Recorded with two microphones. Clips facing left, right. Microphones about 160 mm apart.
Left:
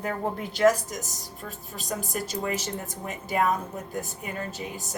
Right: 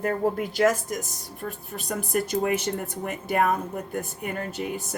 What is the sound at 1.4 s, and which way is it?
Speech, 60° right (ahead or behind).